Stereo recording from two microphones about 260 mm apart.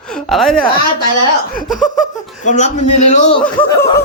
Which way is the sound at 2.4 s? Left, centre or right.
Left.